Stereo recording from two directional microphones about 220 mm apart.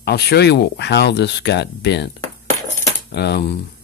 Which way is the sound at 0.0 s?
50° left (ahead or behind).